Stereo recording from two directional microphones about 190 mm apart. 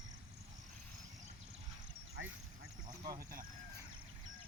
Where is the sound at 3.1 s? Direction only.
50° right (ahead or behind).